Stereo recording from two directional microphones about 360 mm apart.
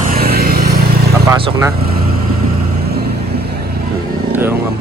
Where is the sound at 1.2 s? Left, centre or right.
Centre.